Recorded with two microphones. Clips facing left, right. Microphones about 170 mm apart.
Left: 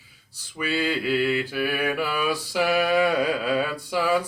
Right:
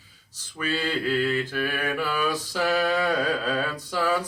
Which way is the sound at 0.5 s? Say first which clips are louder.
Left 2 dB; 10° left (ahead or behind).